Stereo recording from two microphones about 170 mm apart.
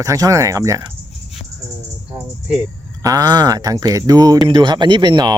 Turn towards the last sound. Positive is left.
turn(degrees=-25)  # may be behind; listen again after turning